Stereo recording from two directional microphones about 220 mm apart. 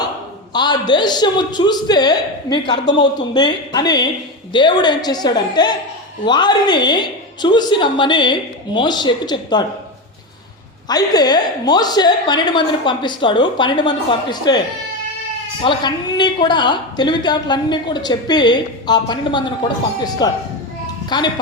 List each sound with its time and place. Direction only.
0.5 s a woman's voice: 20° left (ahead or behind)
10.8 s a woman's voice: 20° left (ahead or behind)
15.6 s a woman's voice: 20° left (ahead or behind)